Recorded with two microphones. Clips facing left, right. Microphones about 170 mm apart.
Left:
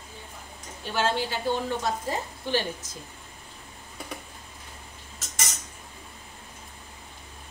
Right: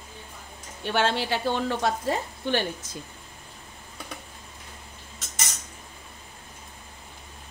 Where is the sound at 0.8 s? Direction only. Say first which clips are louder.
Right 2 dB; 70° right (ahead or behind).